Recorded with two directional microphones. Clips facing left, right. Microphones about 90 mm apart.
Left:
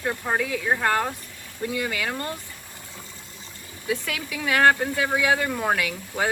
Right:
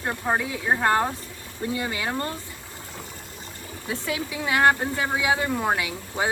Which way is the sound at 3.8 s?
25° right (ahead or behind).